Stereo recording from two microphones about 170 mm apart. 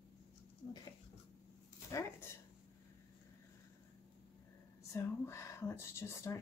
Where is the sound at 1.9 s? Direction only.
20° left (ahead or behind).